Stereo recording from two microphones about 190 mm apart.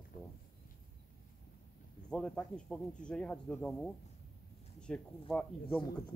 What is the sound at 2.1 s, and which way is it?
Speech, 5° left (ahead or behind).